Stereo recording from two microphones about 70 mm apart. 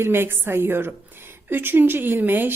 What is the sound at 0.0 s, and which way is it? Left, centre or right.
Speech, right.